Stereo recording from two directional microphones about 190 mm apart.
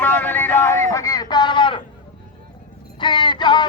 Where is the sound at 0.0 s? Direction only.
10° left (ahead or behind); by 1.8 s 25° left (ahead or behind).